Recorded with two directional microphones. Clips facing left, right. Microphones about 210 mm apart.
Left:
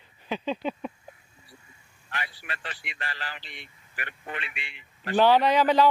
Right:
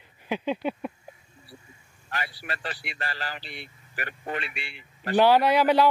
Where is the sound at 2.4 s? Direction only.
40° right (ahead or behind).